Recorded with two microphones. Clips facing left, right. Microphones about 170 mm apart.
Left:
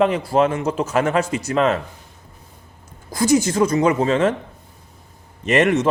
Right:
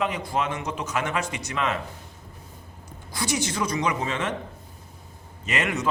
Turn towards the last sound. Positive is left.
turn(degrees=50)  # may be behind; listen again after turning